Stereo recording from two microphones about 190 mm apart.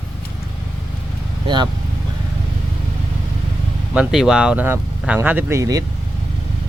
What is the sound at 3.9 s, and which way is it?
Speech, 5° right (ahead or behind).